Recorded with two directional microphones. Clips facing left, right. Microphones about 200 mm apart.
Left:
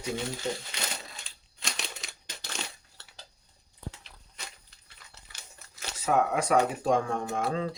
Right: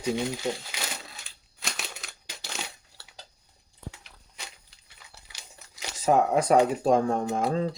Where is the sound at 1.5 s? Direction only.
5° right (ahead or behind).